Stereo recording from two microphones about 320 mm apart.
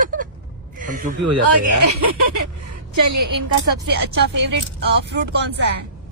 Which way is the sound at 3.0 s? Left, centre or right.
Right.